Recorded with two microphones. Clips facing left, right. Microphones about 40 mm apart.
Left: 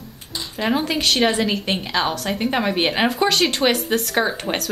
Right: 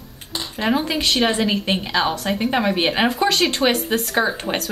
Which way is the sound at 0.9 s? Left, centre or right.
Centre.